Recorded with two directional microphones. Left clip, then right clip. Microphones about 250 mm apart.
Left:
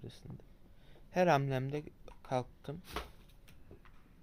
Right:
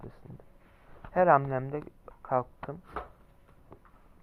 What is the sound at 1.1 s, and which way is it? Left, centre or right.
Speech, left.